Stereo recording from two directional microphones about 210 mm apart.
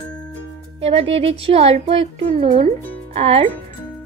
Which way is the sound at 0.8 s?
30° right (ahead or behind).